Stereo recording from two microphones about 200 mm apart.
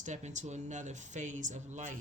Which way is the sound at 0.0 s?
35° right (ahead or behind).